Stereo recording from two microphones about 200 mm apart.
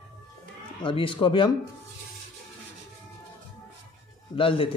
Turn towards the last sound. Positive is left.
turn(degrees=25)  # may be behind; listen again after turning